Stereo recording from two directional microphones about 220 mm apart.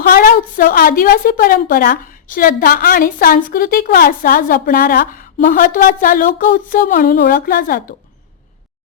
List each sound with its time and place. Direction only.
0.1 s a woman's voice: 40° left (ahead or behind)